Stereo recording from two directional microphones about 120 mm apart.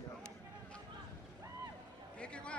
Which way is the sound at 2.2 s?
10° left (ahead or behind).